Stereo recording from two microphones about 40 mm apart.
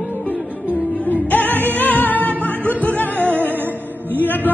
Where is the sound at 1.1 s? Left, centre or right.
Left.